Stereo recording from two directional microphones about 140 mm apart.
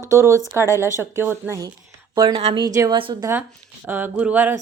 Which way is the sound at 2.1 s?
35° right (ahead or behind).